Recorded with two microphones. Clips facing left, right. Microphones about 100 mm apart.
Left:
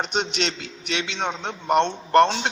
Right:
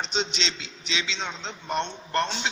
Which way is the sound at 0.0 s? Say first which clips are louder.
Left 4 dB; 55° left (ahead or behind).